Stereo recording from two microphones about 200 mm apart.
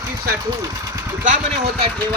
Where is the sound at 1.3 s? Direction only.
35° right (ahead or behind).